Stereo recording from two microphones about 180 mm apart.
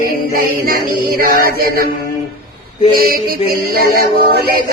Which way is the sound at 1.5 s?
55° right (ahead or behind).